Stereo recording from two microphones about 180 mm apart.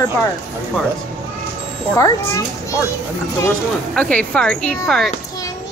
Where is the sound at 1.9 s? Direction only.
15° left (ahead or behind).